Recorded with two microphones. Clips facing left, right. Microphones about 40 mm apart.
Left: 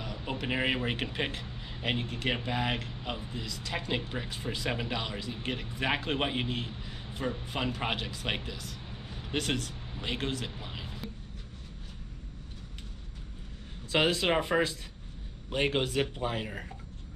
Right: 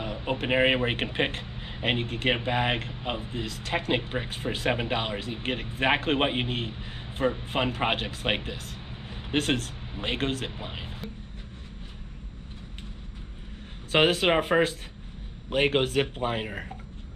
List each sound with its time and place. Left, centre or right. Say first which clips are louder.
0.0 s a man's voice: right 6 dB; right
13.9 s a man's voice: right 5 dB; right